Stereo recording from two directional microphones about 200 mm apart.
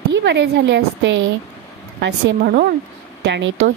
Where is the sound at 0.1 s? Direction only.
65° right (ahead or behind).